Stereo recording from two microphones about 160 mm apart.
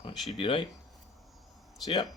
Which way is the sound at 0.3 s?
35° left (ahead or behind).